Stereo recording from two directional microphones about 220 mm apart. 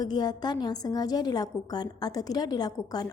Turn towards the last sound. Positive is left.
turn(degrees=15)  # may be behind; listen again after turning